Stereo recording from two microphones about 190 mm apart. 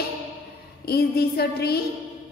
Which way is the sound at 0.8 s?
55° left (ahead or behind).